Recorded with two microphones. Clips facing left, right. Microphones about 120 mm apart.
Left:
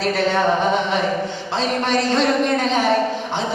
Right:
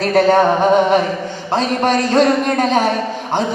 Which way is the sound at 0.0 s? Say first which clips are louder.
Right 7 dB; 45° right (ahead or behind).